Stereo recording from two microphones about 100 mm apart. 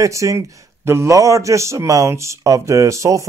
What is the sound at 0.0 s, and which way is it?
Speech, 30° right (ahead or behind).